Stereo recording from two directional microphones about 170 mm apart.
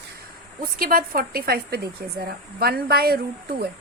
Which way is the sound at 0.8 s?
60° right (ahead or behind).